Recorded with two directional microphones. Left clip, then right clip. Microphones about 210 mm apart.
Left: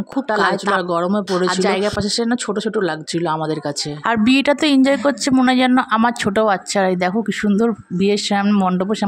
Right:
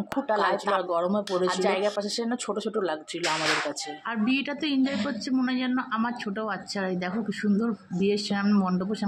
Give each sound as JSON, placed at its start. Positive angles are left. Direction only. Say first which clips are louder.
{"t": 0.3, "sound": "a woman's voice", "louder": "left 8 dB", "side_deg": 45}
{"t": 4.1, "sound": "a woman's voice", "louder": "left 13 dB", "side_deg": 55}